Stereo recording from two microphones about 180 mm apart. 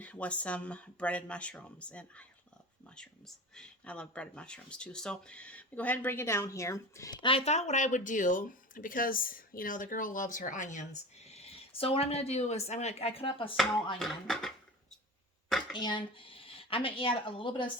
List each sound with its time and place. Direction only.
0.0 s speech: 5° left (ahead or behind); by 13.5 s 30° left (ahead or behind)
14.0 s speech: centre (ahead or behind)
15.7 s speech: 25° left (ahead or behind)